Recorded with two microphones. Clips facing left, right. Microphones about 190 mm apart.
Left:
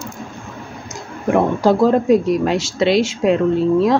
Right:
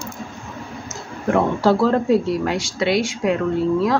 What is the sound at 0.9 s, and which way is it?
Speech, 15° left (ahead or behind).